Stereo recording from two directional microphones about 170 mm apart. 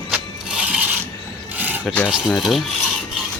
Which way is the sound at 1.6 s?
10° right (ahead or behind).